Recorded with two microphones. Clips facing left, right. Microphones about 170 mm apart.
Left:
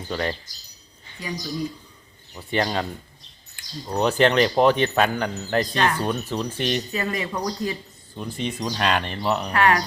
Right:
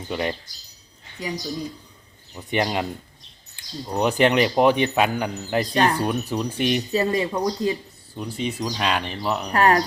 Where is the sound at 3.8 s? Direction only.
10° right (ahead or behind).